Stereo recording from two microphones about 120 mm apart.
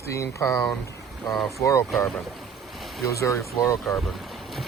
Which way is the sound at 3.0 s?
25° left (ahead or behind).